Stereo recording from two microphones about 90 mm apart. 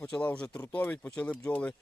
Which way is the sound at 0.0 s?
15° left (ahead or behind).